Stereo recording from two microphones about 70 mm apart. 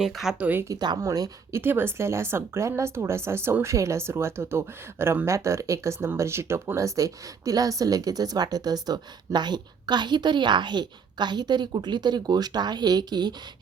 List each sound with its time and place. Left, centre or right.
0.0 s speech: centre
0.3 s speech: right
0.7 s a woman's voice: right
1.0 s a woman's voice: right
1.5 s a woman's voice: right